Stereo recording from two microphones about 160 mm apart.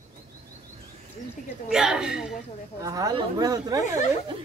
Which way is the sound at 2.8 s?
20° right (ahead or behind).